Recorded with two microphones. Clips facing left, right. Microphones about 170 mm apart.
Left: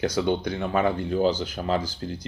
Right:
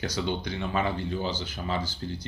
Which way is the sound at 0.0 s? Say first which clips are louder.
Left 6 dB; 55° left (ahead or behind).